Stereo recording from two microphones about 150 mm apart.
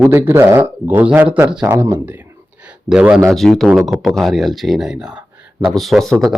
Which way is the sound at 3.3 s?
Centre (ahead or behind).